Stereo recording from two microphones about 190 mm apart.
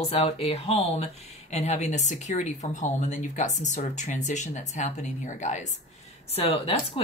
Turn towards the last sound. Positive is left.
turn(degrees=30)  # may be behind; listen again after turning